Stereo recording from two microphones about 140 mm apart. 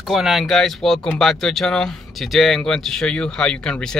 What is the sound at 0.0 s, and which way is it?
Speech, centre (ahead or behind).